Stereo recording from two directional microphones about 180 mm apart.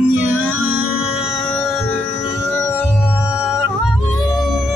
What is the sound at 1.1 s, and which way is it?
Music, centre (ahead or behind).